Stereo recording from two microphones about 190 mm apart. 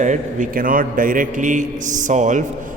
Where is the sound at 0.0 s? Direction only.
40° right (ahead or behind).